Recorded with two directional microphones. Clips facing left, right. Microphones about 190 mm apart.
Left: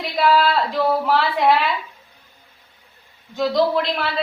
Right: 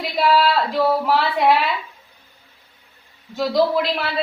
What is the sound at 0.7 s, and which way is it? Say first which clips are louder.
Speech: right 1 dB; centre (ahead or behind).